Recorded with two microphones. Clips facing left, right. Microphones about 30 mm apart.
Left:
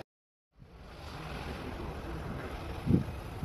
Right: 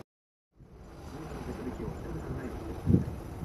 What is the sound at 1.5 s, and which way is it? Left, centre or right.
Vehicle, left.